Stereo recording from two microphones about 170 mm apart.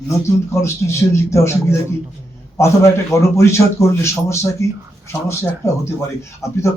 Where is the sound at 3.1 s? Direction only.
15° left (ahead or behind).